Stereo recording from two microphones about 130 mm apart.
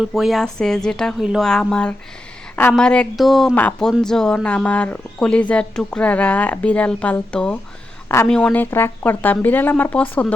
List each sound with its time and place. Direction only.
0.0 s speech: centre (ahead or behind)
3.5 s speech: 10° left (ahead or behind)
8.0 s a sound: 20° left (ahead or behind)
8.3 s speech: 5° left (ahead or behind)